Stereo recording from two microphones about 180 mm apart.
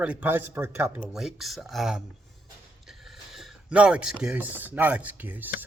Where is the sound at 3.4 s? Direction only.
5° right (ahead or behind).